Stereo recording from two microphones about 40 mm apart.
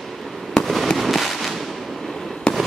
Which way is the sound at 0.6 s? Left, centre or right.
Centre.